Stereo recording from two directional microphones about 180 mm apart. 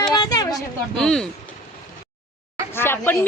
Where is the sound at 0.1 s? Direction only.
25° left (ahead or behind).